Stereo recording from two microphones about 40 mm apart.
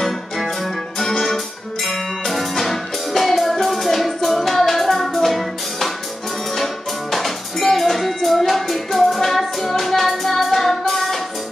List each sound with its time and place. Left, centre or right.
0.9 s music: centre